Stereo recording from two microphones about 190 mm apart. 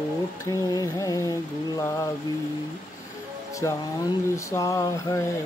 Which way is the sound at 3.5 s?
15° left (ahead or behind).